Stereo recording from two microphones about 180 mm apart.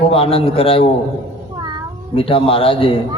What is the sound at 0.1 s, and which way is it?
Speech, 30° left (ahead or behind).